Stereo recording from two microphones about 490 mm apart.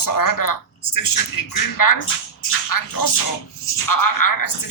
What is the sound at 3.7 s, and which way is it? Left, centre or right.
Speech, left.